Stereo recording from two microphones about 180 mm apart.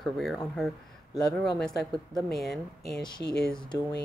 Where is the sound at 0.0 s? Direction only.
Centre (ahead or behind).